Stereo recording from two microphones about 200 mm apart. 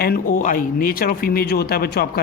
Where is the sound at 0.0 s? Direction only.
45° left (ahead or behind).